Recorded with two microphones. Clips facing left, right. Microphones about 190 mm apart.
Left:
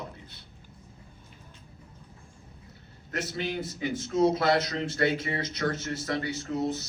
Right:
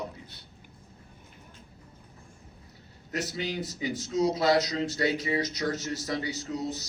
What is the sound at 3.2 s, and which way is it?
Speech, 55° left (ahead or behind).